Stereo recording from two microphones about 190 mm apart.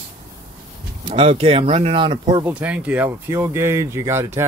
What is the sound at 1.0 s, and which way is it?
Speech, 30° right (ahead or behind).